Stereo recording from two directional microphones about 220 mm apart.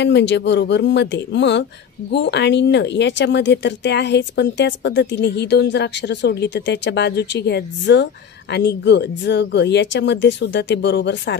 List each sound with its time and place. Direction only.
0.0 s speech: 55° left (ahead or behind)